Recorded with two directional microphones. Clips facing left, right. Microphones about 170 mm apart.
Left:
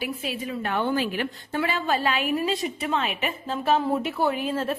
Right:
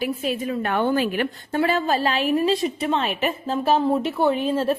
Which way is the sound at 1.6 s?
40° right (ahead or behind).